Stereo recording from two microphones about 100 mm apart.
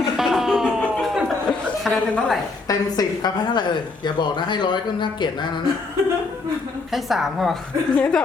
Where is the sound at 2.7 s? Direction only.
40° left (ahead or behind).